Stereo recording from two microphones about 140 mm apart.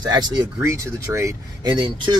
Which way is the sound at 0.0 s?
30° right (ahead or behind).